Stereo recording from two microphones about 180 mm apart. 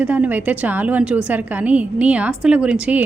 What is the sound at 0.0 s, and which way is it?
A woman's voice, 10° right (ahead or behind).